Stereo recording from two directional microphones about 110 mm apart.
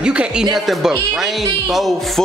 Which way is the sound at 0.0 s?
10° right (ahead or behind).